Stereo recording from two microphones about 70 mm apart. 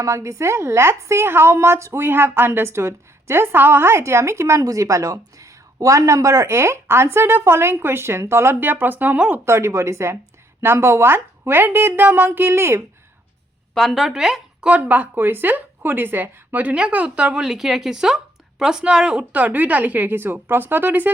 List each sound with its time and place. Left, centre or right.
0.0 s a woman's voice: right
9.4 s a woman's voice: right
13.7 s speech: centre
14.7 s a woman's voice: right